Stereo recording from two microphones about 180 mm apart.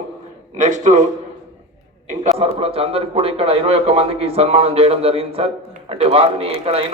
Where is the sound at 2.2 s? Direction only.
35° right (ahead or behind).